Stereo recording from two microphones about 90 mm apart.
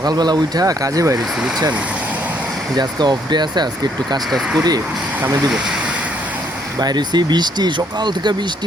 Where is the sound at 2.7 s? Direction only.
50° right (ahead or behind).